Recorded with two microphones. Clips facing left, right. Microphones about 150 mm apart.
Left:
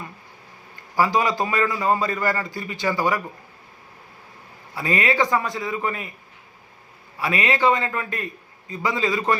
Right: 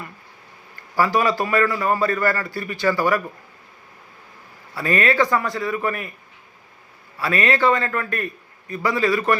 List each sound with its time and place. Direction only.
0.9 s a man's voice: 15° left (ahead or behind)
4.7 s a man's voice: 20° left (ahead or behind)
7.2 s a man's voice: 20° left (ahead or behind)